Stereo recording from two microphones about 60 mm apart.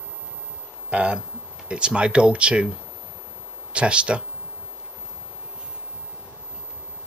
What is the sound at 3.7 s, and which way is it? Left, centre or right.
Speech, centre.